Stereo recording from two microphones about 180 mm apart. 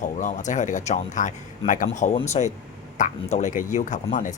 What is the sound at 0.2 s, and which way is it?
Speech, 45° left (ahead or behind).